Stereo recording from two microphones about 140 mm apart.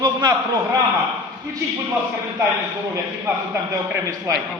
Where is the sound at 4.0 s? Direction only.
25° right (ahead or behind).